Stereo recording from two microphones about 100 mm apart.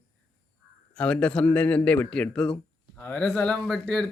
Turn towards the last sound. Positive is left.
turn(degrees=5)  # may be behind; listen again after turning